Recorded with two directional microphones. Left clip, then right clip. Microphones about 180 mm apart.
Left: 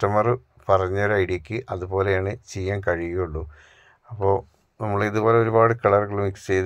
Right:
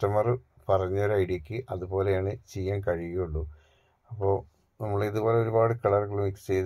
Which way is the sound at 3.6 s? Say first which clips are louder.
Left 13 dB; 20° left (ahead or behind).